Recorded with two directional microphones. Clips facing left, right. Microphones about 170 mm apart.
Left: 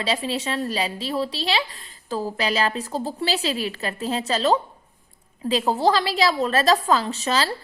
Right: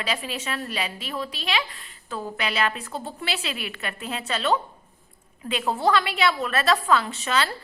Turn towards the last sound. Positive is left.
turn(degrees=35)  # may be behind; listen again after turning